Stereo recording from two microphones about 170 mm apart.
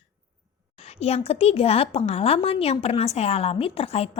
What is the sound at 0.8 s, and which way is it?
A woman's voice, 35° left (ahead or behind).